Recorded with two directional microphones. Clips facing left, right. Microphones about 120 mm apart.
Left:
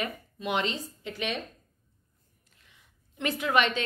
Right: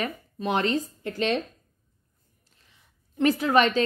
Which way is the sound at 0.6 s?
50° right (ahead or behind).